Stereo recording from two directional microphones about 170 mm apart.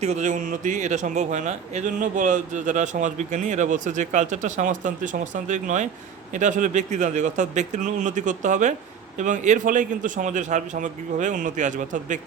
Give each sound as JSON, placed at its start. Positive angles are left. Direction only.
{"t": 0.0, "sound": "a man's voice", "side_deg": -45}